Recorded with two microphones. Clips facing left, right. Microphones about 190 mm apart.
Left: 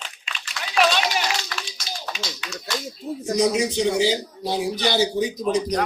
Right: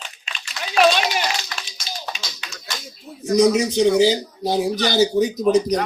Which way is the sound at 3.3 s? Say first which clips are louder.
Right 5 dB; 40° right (ahead or behind).